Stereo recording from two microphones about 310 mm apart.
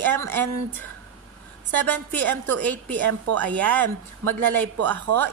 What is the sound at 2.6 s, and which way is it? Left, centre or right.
Speech, centre.